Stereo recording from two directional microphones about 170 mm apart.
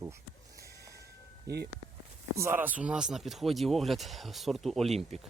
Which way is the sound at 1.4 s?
70° right (ahead or behind).